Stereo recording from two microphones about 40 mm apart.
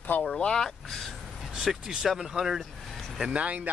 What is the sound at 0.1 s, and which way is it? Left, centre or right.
Speech, left.